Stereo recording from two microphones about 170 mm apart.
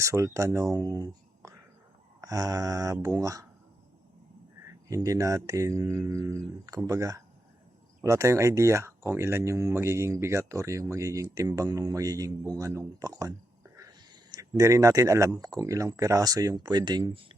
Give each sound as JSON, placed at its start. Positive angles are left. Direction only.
{"t": 0.0, "sound": "speech", "side_deg": -15}
{"t": 4.9, "sound": "speech", "side_deg": -20}
{"t": 13.7, "sound": "a sound", "side_deg": -20}
{"t": 15.4, "sound": "speech", "side_deg": -20}